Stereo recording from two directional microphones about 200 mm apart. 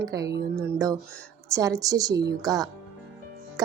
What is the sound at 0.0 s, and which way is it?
Speech, 15° right (ahead or behind).